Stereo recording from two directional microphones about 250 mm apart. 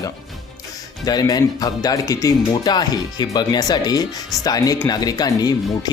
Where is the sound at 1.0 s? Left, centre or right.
Centre.